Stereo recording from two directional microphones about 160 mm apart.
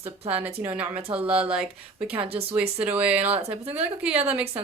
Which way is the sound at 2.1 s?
35° right (ahead or behind).